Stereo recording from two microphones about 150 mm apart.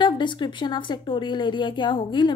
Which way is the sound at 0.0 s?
30° left (ahead or behind).